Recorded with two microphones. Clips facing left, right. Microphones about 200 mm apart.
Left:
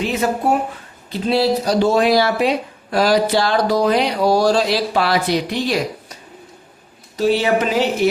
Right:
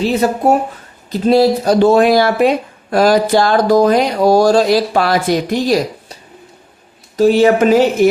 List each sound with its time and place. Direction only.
0.0 s speech: 35° right (ahead or behind)
7.2 s speech: 45° right (ahead or behind)